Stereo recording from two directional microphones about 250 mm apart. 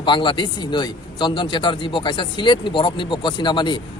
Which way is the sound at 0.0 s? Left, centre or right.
Centre.